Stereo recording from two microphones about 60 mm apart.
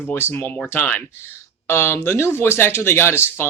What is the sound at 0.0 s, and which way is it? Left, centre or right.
Speech, left.